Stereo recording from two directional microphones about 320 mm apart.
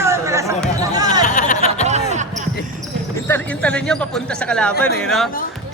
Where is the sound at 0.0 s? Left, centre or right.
Centre.